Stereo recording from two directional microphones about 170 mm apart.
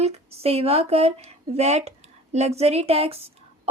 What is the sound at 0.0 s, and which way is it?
Speech, 40° right (ahead or behind).